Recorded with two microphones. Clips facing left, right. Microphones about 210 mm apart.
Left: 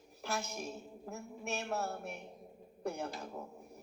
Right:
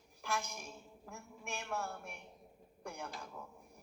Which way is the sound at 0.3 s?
30° left (ahead or behind).